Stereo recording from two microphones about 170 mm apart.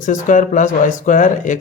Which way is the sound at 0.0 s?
50° left (ahead or behind).